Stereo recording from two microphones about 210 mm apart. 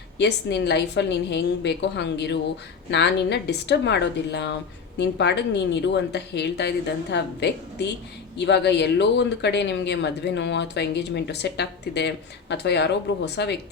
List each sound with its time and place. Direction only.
0.2 s a woman's voice: 55° left (ahead or behind)